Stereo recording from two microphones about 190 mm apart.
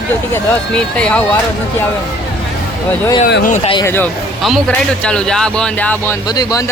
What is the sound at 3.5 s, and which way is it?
Speech, 40° left (ahead or behind).